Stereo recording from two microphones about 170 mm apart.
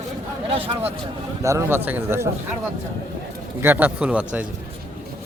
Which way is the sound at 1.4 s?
15° right (ahead or behind).